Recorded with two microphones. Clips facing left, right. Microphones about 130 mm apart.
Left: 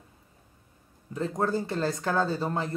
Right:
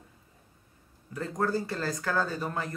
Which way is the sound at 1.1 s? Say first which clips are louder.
Left 2 dB; 25° left (ahead or behind).